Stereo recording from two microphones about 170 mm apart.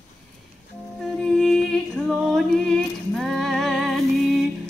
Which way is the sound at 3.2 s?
Centre (ahead or behind).